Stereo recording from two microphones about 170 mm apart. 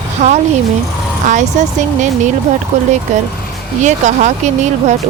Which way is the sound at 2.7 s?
45° right (ahead or behind).